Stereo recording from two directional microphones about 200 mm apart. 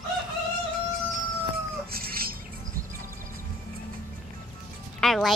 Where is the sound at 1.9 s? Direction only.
50° right (ahead or behind).